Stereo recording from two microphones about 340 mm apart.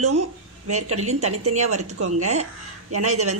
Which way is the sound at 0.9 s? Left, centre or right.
Centre.